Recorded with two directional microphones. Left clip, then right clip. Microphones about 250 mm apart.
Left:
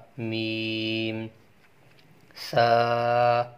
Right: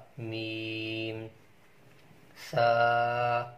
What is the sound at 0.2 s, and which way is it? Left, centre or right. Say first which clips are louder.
Mantra: left 7 dB; left.